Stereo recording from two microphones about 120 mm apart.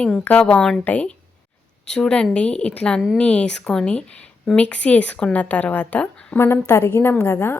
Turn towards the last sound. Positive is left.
turn(degrees=20)  # may be behind; listen again after turning